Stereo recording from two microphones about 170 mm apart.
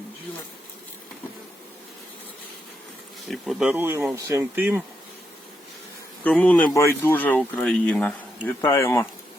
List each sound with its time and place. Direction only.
3.2 s speech: centre (ahead or behind)
6.2 s speech: 10° left (ahead or behind)